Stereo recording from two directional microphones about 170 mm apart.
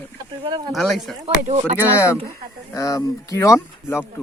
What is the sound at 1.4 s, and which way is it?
Speech, 45° right (ahead or behind).